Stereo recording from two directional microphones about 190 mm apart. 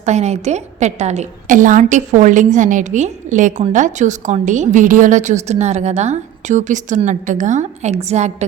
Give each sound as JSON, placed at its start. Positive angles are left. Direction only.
{"t": 0.0, "sound": "a woman's voice", "side_deg": -35}